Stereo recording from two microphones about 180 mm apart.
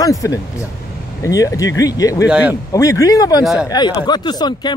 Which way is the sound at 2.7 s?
20° left (ahead or behind).